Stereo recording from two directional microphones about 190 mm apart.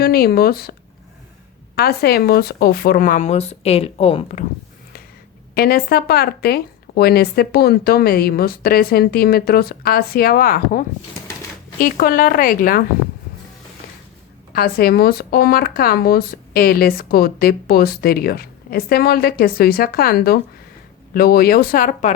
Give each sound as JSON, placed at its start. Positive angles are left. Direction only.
{"t": 0.0, "sound": "speech", "side_deg": 55}
{"t": 5.5, "sound": "speech", "side_deg": 55}
{"t": 14.5, "sound": "speech", "side_deg": 55}